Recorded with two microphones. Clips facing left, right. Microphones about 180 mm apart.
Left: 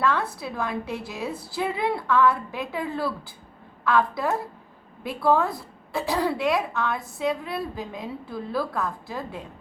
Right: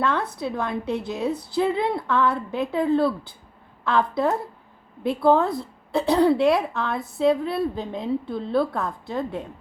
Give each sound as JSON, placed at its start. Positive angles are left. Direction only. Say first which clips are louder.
{"t": 0.3, "sound": "a woman's voice", "louder": "right 3 dB", "side_deg": -25}